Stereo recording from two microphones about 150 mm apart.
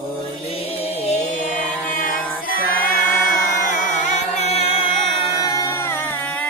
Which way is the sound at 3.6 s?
60° left (ahead or behind).